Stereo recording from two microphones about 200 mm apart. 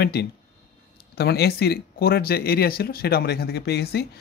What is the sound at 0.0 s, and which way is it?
Speech, 55° left (ahead or behind).